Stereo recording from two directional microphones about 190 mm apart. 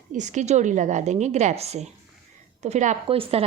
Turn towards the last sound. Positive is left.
turn(degrees=-30)  # may be behind; listen again after turning